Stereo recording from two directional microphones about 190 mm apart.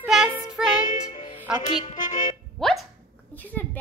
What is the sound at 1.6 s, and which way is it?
Speech, 40° left (ahead or behind).